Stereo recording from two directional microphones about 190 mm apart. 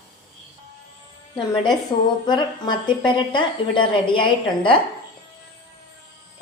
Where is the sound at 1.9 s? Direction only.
25° left (ahead or behind).